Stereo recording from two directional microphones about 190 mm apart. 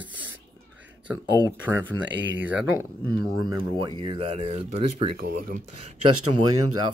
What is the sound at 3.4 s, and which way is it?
Speech, 25° right (ahead or behind).